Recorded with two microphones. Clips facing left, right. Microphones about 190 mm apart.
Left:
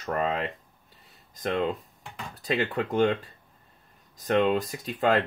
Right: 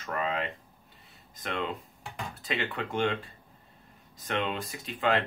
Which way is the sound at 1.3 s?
40° left (ahead or behind).